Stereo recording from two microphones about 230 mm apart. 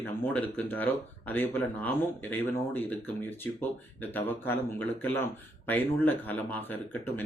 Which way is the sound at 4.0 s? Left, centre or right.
Centre.